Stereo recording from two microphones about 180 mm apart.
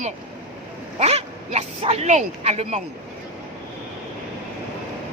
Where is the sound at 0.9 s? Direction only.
35° right (ahead or behind).